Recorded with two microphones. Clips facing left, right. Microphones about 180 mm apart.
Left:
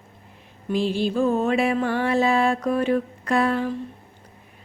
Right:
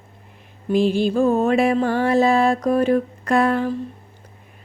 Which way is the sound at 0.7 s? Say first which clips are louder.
Right 5 dB; 50° right (ahead or behind).